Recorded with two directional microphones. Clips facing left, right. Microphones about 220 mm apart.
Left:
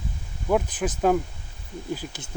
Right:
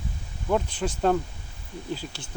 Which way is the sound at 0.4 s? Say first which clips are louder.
Left 2 dB; 5° left (ahead or behind).